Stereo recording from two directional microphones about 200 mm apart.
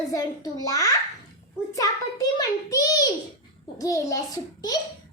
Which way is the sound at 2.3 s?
20° left (ahead or behind).